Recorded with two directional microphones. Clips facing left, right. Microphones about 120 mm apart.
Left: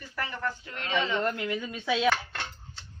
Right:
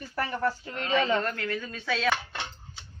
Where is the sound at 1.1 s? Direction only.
15° left (ahead or behind).